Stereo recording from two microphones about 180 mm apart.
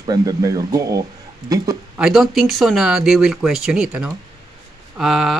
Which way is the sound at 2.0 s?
Centre (ahead or behind).